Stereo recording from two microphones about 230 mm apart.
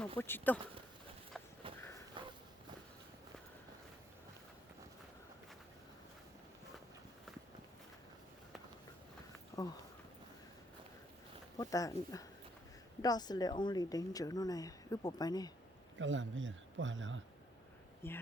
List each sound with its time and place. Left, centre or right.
0.2 s speech: centre
1.6 s walk: right
9.5 s a sound: centre
11.5 s speech: centre
16.0 s a man's voice: right
18.0 s speech: centre